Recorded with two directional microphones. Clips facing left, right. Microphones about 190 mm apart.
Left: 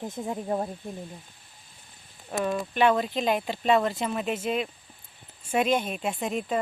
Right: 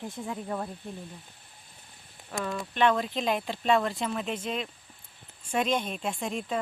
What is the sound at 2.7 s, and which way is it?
Speech, 5° left (ahead or behind).